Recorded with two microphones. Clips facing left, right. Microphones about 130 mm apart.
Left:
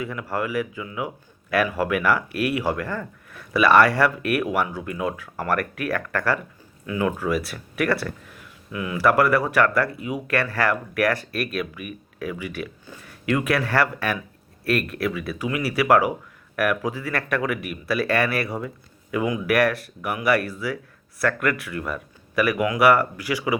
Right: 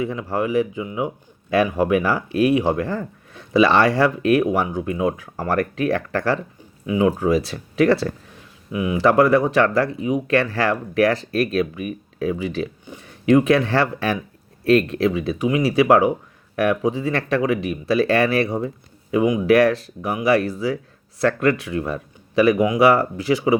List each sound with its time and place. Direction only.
0.0 s speech: 25° right (ahead or behind)